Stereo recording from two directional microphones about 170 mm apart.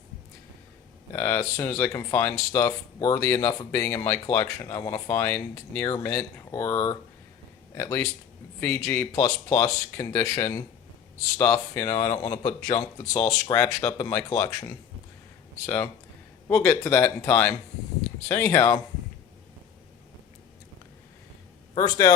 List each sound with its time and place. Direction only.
1.1 s speech: 15° left (ahead or behind)
21.8 s speech: 25° left (ahead or behind)